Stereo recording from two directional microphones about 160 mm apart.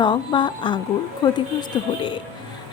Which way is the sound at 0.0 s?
30° left (ahead or behind).